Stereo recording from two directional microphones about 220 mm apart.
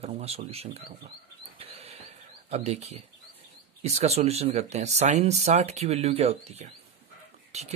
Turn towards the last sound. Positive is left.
turn(degrees=-30)  # may be behind; listen again after turning